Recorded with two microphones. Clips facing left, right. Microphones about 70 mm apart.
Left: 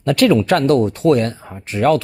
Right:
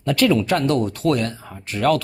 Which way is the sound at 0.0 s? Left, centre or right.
Left.